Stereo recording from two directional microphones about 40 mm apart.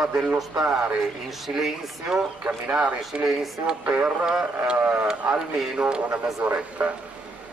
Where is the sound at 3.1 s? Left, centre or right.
Right.